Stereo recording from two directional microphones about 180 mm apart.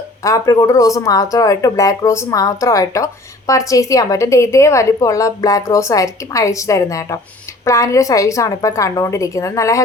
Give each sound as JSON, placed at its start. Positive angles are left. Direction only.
{"t": 0.2, "sound": "speech", "side_deg": 15}